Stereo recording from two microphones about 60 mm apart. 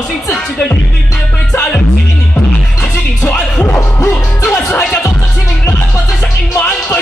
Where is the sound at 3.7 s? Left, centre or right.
Left.